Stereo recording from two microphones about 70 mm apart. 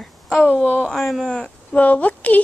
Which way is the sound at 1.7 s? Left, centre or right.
Left.